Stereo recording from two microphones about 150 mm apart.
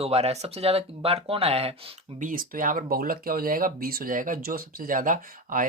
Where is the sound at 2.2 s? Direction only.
65° right (ahead or behind).